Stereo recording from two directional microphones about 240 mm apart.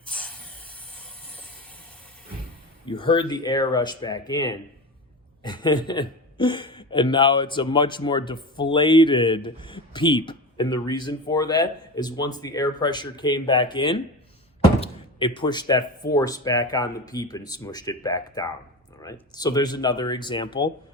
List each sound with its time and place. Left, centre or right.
0.1 s a sound: centre
0.9 s train: centre
2.8 s speech: centre